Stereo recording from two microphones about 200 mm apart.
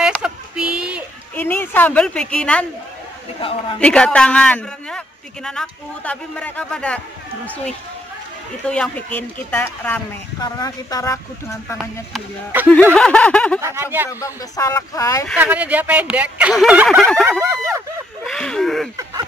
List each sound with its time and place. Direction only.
0.2 s a sound: 5° right (ahead or behind)
1.3 s speech: 10° left (ahead or behind)
3.3 s a man's voice: 25° left (ahead or behind)
3.8 s a man's voice: 5° left (ahead or behind)
13.6 s speech: 15° right (ahead or behind)
14.0 s speech: 15° left (ahead or behind)
15.3 s speech: 5° right (ahead or behind)
17.4 s speech: 15° right (ahead or behind)
18.2 s a man's voice: 5° left (ahead or behind)